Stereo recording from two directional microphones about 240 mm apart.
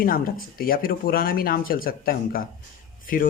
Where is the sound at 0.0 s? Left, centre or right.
Left.